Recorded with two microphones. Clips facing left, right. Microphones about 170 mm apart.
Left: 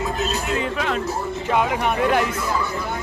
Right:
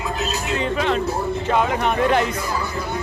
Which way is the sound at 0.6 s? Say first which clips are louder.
Right 3 dB; 5° left (ahead or behind).